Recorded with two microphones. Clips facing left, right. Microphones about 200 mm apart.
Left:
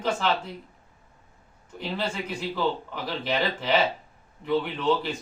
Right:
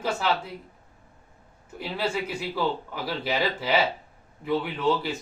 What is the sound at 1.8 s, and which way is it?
Speech, 5° right (ahead or behind).